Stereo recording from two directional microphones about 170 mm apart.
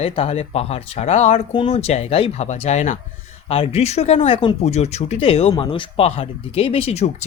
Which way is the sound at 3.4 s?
35° left (ahead or behind).